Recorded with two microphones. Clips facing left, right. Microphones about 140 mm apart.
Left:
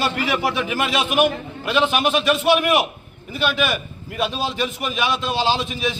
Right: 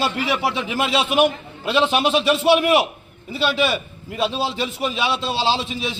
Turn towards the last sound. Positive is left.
turn(degrees=-30)  # may be behind; listen again after turning